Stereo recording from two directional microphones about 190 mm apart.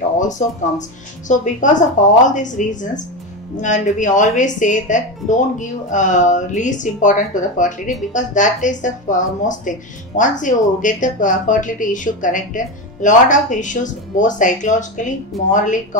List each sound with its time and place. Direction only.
0.3 s speech: 40° left (ahead or behind)